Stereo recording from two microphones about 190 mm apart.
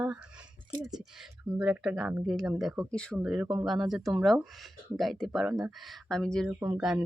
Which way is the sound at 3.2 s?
5° right (ahead or behind).